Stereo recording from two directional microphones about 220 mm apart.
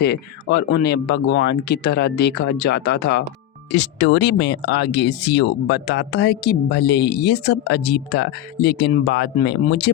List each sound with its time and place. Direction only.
0.0 s speech: 50° left (ahead or behind)